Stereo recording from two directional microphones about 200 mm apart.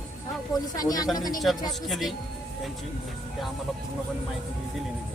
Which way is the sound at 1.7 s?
Centre (ahead or behind).